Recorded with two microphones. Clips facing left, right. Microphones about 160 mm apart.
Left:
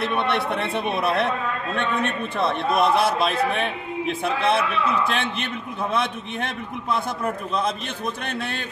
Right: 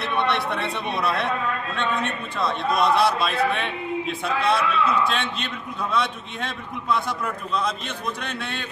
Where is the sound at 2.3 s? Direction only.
55° left (ahead or behind).